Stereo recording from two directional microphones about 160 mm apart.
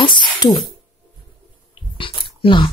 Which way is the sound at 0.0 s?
30° left (ahead or behind).